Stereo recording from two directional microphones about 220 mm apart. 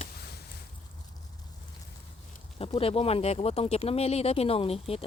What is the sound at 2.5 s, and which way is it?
Speech, 25° left (ahead or behind).